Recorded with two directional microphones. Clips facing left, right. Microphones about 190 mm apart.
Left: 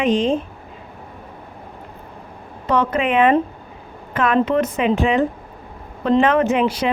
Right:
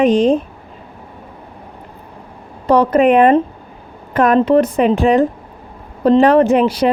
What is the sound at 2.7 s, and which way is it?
A woman's voice, 35° right (ahead or behind).